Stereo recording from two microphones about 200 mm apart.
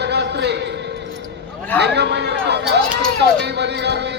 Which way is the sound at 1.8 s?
55° right (ahead or behind).